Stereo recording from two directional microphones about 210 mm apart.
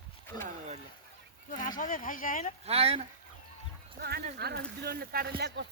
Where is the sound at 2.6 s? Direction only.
30° right (ahead or behind).